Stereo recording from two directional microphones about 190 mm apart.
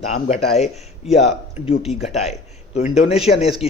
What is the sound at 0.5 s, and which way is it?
Speech, 35° left (ahead or behind).